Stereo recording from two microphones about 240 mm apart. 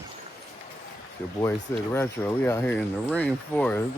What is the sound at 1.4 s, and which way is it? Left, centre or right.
Speech, centre.